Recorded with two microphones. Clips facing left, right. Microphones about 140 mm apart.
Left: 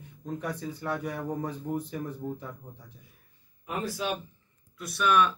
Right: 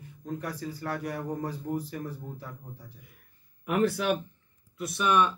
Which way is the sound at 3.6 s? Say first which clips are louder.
Right 6 dB; 70° right (ahead or behind).